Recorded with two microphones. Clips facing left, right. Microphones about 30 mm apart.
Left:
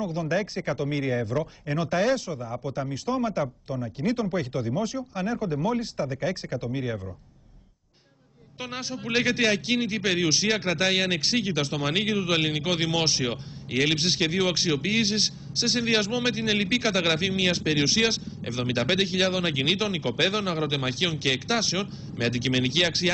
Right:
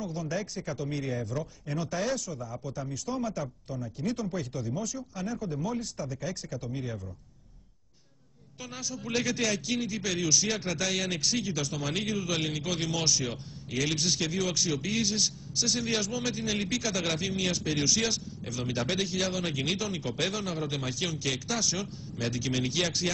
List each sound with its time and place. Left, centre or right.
0.0 s speech: left
8.5 s speech: left